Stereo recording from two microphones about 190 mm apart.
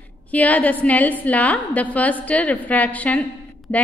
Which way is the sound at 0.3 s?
10° left (ahead or behind).